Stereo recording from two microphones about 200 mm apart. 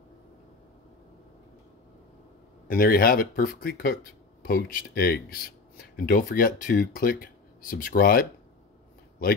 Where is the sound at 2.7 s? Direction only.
45° left (ahead or behind).